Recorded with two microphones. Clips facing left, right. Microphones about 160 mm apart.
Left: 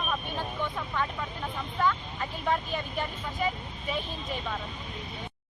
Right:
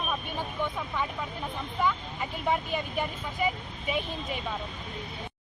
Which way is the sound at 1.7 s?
10° right (ahead or behind).